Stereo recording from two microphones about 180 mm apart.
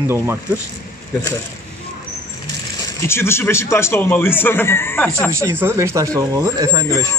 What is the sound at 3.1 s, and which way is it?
A man's voice, 15° left (ahead or behind).